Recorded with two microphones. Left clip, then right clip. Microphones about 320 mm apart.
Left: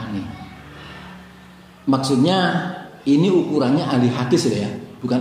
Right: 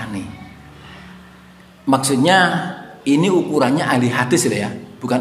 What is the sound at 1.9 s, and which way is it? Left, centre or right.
A man's voice, right.